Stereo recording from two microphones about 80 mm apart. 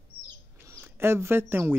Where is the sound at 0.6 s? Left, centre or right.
Right.